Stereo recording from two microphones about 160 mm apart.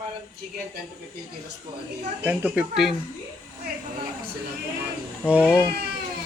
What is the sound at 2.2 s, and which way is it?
Speech, 10° right (ahead or behind).